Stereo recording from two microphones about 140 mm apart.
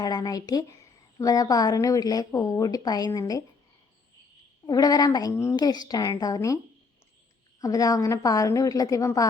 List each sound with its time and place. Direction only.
0.0 s a woman's voice: 30° left (ahead or behind)
4.6 s a woman's voice: 25° left (ahead or behind)
7.6 s a woman's voice: 25° left (ahead or behind)